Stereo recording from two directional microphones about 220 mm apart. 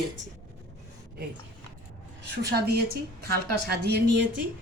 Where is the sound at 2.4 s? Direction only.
45° right (ahead or behind).